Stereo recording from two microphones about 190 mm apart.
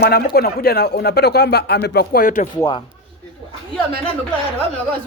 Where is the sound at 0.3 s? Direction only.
55° left (ahead or behind).